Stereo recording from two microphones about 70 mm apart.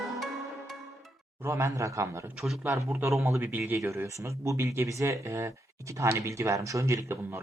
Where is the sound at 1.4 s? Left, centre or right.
Right.